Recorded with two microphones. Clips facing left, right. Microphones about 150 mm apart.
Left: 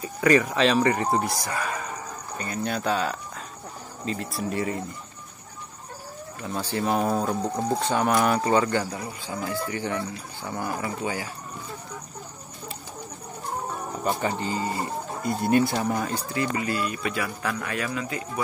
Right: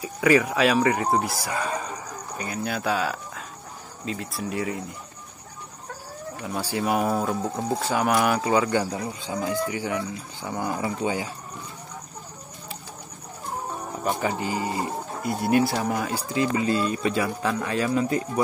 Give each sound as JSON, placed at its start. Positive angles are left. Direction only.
{"t": 0.0, "sound": "speech", "side_deg": -5}
{"t": 1.5, "sound": "speech", "side_deg": -25}
{"t": 2.3, "sound": "speech", "side_deg": -5}
{"t": 6.4, "sound": "speech", "side_deg": -10}
{"t": 14.0, "sound": "speech", "side_deg": -10}
{"t": 15.2, "sound": "speech", "side_deg": -5}